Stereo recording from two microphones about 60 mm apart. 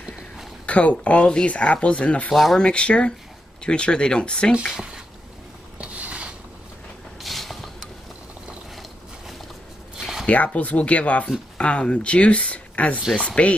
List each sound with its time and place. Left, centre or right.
0.7 s speech: left
2.3 s speech: centre
2.6 s speech: centre
4.7 s speech: centre
5.8 s a sound: right
7.2 s mechanisms: centre
9.9 s a sound: centre
10.2 s speech: left